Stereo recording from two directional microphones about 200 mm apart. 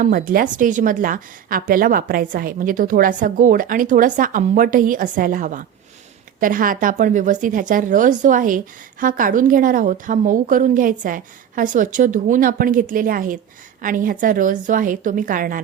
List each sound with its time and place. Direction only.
0.0 s a woman's voice: 45° right (ahead or behind)